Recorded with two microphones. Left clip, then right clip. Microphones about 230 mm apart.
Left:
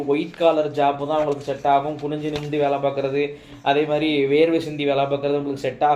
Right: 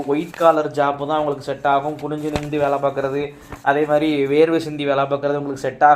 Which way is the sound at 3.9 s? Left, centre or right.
Right.